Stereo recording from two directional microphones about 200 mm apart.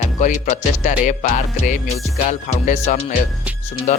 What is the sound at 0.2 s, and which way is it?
Speech, 40° left (ahead or behind).